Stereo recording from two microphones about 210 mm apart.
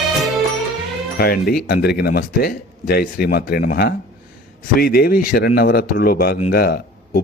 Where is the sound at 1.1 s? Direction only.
45° left (ahead or behind).